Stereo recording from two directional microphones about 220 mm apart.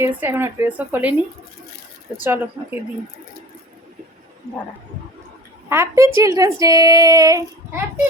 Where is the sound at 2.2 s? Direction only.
10° right (ahead or behind).